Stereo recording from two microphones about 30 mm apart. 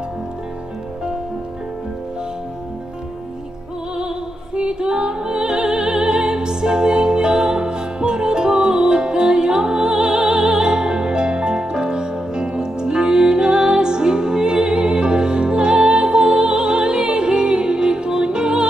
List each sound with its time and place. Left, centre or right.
4.6 s music: right